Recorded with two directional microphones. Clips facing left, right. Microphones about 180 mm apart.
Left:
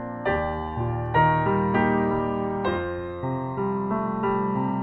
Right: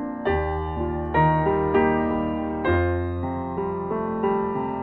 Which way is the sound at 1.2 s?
15° right (ahead or behind).